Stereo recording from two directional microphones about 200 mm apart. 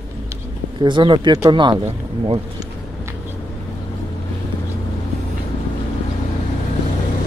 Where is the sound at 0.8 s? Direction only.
25° right (ahead or behind).